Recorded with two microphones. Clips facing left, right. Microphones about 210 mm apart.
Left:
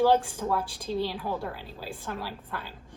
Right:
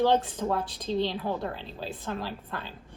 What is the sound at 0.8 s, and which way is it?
A woman's voice, 10° left (ahead or behind).